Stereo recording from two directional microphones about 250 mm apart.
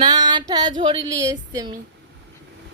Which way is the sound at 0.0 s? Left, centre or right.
Centre.